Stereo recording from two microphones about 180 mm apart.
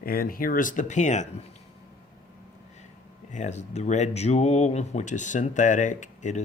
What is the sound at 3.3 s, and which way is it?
Speech, 40° left (ahead or behind).